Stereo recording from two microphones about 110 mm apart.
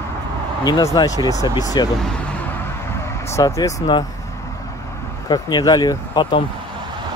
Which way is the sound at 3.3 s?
35° left (ahead or behind).